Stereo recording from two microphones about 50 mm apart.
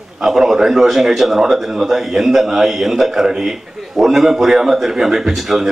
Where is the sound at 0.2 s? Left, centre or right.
Centre.